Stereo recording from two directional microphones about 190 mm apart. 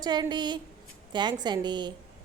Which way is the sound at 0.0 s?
20° right (ahead or behind).